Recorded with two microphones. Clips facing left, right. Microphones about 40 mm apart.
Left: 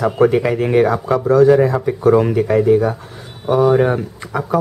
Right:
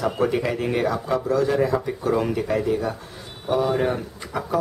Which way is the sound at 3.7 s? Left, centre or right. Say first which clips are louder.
Left 8 dB; left.